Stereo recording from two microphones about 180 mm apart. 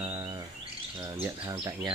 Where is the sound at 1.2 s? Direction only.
15° right (ahead or behind).